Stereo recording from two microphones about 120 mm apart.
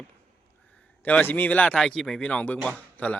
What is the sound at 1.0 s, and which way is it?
Speech, 15° left (ahead or behind).